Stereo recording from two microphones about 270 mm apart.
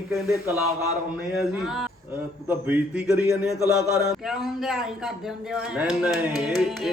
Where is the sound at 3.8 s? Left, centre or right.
Left.